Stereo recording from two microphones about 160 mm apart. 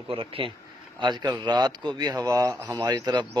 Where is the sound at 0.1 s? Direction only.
35° right (ahead or behind).